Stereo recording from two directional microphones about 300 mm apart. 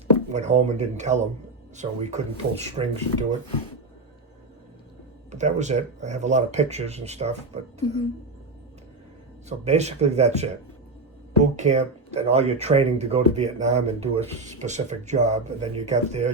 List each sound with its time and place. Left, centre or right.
0.3 s speech: right
5.3 s speech: right
9.5 s speech: right
11.5 s speech: right